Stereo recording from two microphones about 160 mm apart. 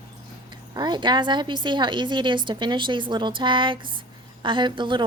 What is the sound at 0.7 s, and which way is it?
A woman's voice, 25° right (ahead or behind).